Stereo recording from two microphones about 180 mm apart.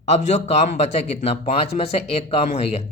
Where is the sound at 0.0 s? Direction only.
40° left (ahead or behind).